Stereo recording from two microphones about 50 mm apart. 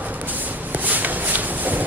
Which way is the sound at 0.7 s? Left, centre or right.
Right.